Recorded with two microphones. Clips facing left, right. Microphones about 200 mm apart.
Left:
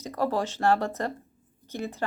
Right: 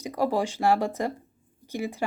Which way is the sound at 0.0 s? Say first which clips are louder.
Right 2 dB; 10° right (ahead or behind).